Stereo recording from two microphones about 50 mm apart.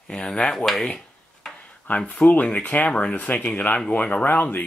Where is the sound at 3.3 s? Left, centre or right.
Centre; by 4.6 s left.